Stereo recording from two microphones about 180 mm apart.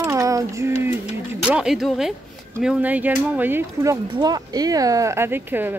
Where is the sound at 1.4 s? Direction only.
5° right (ahead or behind).